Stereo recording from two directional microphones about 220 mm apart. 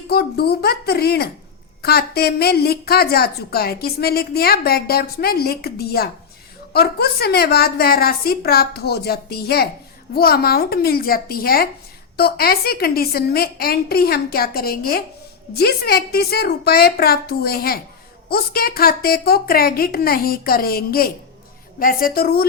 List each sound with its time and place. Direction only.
0.1 s a woman's voice: 45° left (ahead or behind)